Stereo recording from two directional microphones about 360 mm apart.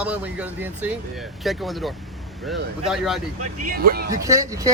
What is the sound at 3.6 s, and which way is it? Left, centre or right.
Speech, right.